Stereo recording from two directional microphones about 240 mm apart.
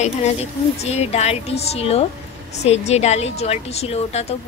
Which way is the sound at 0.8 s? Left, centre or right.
Left.